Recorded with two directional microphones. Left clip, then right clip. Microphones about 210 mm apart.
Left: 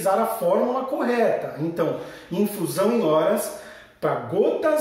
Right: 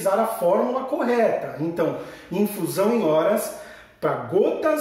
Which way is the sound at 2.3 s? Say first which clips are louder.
Even; centre (ahead or behind).